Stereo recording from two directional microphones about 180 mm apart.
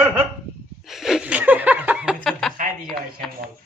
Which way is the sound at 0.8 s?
Centre (ahead or behind).